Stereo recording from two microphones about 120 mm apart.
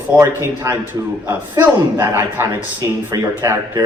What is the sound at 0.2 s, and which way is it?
Speech, 20° right (ahead or behind).